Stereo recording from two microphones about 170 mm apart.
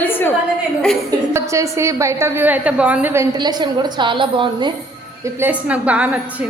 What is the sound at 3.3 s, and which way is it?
A woman's voice, 25° right (ahead or behind).